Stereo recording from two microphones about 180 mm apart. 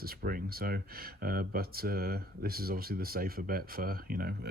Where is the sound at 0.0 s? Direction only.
55° right (ahead or behind).